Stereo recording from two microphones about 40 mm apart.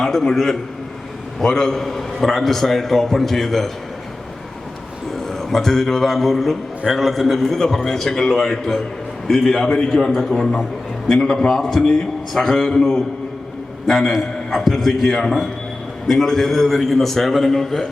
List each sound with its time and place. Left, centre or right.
0.0 s a man's voice: centre
5.3 s a man's voice: centre
10.0 s a man's voice: centre
13.8 s a man's voice: centre